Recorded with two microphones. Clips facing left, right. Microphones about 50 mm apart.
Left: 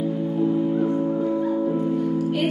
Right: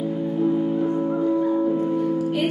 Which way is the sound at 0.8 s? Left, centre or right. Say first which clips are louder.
Even; right.